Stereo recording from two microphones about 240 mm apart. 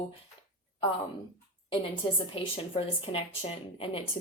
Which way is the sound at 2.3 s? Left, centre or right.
Left.